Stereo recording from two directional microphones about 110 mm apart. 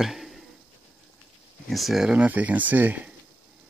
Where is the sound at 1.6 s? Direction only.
Centre (ahead or behind).